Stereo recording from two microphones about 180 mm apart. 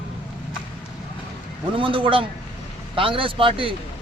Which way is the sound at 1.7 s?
30° right (ahead or behind).